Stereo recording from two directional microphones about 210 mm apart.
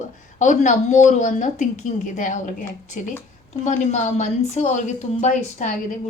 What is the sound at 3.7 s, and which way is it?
A woman's voice, 35° left (ahead or behind).